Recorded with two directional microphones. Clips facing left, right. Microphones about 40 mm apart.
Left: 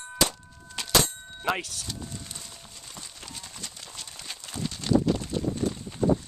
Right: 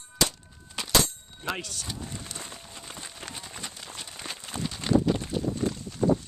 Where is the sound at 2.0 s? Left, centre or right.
Right.